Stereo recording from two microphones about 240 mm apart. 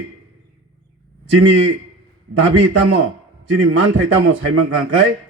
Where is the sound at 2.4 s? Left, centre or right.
Right.